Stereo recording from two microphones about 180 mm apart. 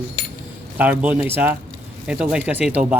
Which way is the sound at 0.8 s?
10° right (ahead or behind).